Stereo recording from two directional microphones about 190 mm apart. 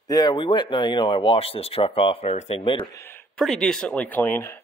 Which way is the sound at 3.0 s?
5° left (ahead or behind).